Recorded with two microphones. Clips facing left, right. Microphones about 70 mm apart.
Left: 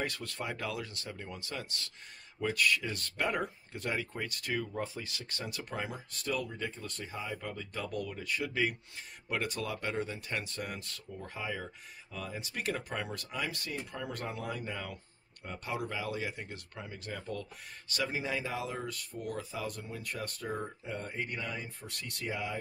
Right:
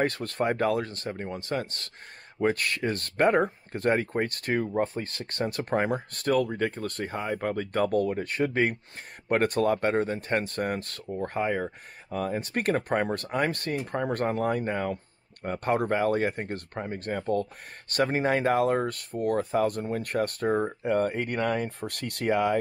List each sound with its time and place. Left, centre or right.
0.0 s speech: right